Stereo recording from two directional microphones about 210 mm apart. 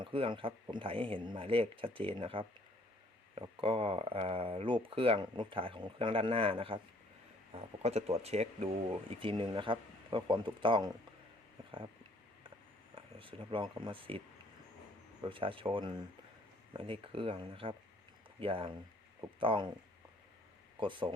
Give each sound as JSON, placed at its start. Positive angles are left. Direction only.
{"t": 0.0, "sound": "speech", "side_deg": -25}
{"t": 13.0, "sound": "speech", "side_deg": -25}
{"t": 15.2, "sound": "speech", "side_deg": -25}
{"t": 20.7, "sound": "speech", "side_deg": -25}